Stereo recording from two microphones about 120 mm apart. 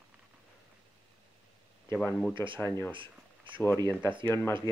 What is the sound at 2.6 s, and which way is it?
Speech, 20° left (ahead or behind).